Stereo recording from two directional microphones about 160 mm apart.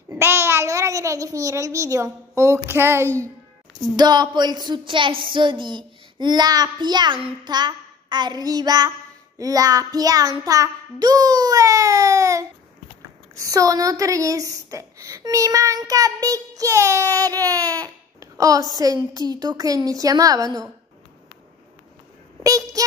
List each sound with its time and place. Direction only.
0.1 s a child's voice: 15° right (ahead or behind)
3.9 s speech: 25° right (ahead or behind)
22.4 s a sound: 20° right (ahead or behind)